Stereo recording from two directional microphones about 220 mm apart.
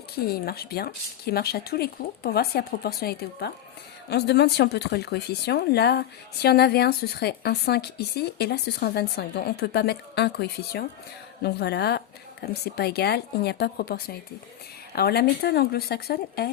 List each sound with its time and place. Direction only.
0.3 s speech: 45° left (ahead or behind)